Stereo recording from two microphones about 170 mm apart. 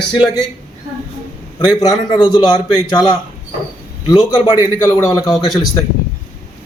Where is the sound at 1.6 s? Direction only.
25° left (ahead or behind).